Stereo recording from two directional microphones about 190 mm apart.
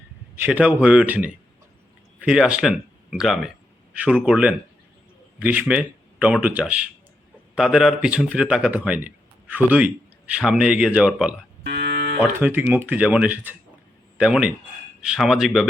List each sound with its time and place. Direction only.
0.3 s speech: 10° right (ahead or behind)
11.6 s moo: 55° right (ahead or behind)
12.2 s speech: 10° right (ahead or behind)